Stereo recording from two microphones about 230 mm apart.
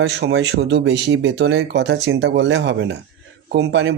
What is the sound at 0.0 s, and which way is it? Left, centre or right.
Speech, right.